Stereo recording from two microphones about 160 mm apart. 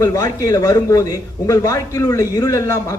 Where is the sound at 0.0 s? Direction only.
20° left (ahead or behind).